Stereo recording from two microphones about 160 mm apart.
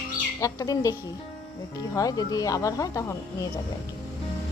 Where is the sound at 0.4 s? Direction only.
20° left (ahead or behind).